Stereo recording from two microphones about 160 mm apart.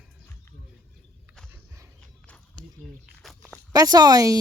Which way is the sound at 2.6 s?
35° left (ahead or behind).